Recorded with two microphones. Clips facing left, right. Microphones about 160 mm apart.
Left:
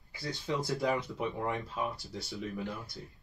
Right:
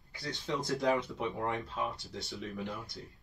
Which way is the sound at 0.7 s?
Centre (ahead or behind).